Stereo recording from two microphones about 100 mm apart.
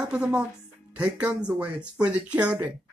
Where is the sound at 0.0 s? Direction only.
10° right (ahead or behind).